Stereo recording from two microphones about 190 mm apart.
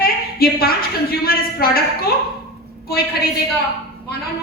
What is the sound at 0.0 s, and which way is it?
A woman's voice, 50° left (ahead or behind).